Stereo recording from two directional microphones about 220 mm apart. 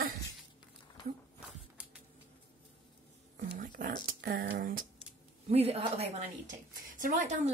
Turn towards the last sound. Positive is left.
turn(degrees=-35)  # may be behind; listen again after turning